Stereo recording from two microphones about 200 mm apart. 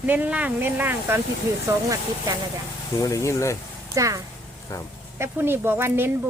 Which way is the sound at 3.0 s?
15° left (ahead or behind).